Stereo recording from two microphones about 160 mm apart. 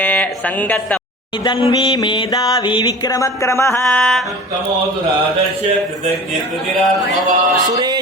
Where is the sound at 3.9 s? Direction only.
5° left (ahead or behind).